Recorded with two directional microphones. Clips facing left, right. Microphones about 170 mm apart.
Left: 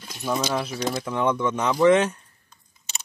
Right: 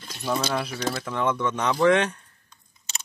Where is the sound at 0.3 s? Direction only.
10° left (ahead or behind).